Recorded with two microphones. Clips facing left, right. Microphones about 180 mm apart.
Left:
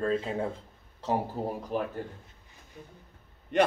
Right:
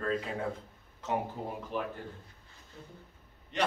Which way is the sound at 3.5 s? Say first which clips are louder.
Left 7 dB; 55° left (ahead or behind).